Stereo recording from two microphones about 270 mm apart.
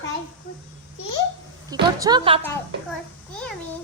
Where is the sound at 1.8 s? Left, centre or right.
Centre.